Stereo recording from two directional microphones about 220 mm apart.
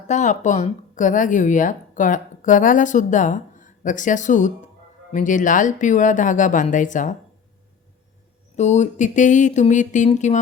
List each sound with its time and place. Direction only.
0.1 s speech: 35° left (ahead or behind)
8.5 s speech: 30° left (ahead or behind)